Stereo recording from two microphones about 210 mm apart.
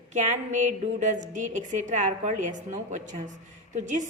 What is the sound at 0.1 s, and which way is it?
A woman's voice, 35° right (ahead or behind).